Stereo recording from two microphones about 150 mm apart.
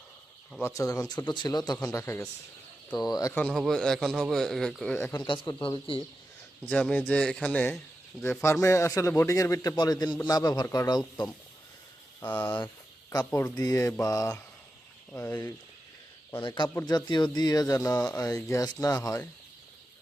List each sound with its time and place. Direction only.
0.6 s speech: 20° left (ahead or behind)
3.4 s a man's voice: centre (ahead or behind)
5.1 s speech: 30° left (ahead or behind)
6.7 s a man's voice: 5° left (ahead or behind); by 11.3 s 30° left (ahead or behind)
12.2 s a man's voice: 10° left (ahead or behind)
16.8 s speech: 30° left (ahead or behind)